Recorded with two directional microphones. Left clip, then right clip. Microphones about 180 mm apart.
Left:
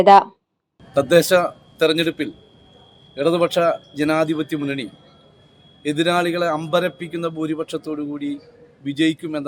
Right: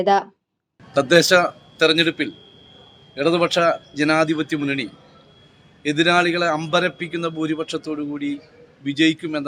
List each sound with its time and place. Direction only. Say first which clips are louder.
0.0 s speech: left 7 dB; 25° left (ahead or behind)
0.9 s a man's voice: even; 10° left (ahead or behind)